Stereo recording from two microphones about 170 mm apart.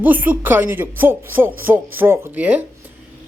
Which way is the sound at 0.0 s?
10° right (ahead or behind).